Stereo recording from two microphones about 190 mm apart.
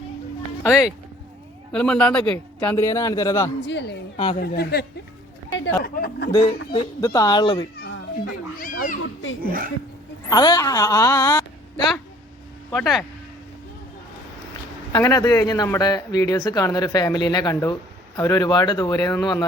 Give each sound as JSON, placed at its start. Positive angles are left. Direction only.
{"t": 0.6, "sound": "speech", "side_deg": 15}
{"t": 1.7, "sound": "speech", "side_deg": 5}
{"t": 3.7, "sound": "speech", "side_deg": 65}
{"t": 5.5, "sound": "a sound", "side_deg": 70}
{"t": 5.9, "sound": "speech", "side_deg": 55}
{"t": 6.7, "sound": "speech", "side_deg": 20}
{"t": 8.5, "sound": "a child's voice", "side_deg": 45}
{"t": 9.4, "sound": "speech", "side_deg": -50}
{"t": 10.2, "sound": "speech", "side_deg": 20}
{"t": 12.7, "sound": "speech", "side_deg": 0}
{"t": 14.9, "sound": "speech", "side_deg": 20}